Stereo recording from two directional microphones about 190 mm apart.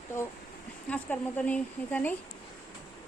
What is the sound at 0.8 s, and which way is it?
A woman's voice, 10° left (ahead or behind).